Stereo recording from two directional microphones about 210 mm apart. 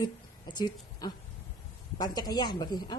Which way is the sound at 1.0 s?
20° left (ahead or behind).